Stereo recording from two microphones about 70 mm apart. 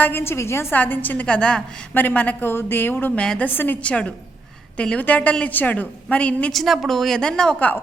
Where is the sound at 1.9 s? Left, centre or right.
Left.